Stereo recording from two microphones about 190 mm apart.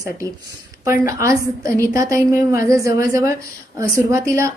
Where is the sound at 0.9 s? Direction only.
15° right (ahead or behind).